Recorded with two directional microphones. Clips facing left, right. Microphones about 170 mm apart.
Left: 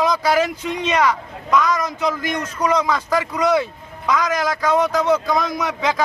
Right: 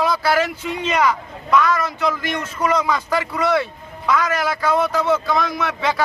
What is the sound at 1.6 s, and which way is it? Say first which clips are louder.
Speech: right 1 dB; 15° left (ahead or behind).